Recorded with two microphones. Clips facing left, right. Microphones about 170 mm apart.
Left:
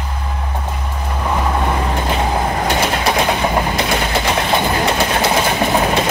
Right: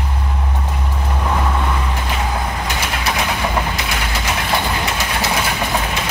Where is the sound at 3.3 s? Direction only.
30° left (ahead or behind).